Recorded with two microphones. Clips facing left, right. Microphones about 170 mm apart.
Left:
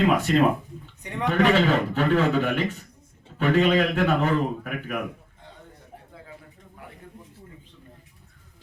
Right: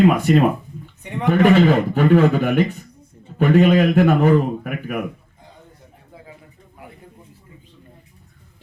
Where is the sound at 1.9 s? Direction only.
50° right (ahead or behind).